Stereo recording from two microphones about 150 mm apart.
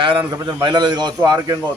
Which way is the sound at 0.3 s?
30° right (ahead or behind).